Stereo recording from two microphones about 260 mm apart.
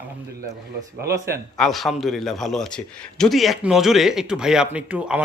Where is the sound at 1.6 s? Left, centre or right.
Centre.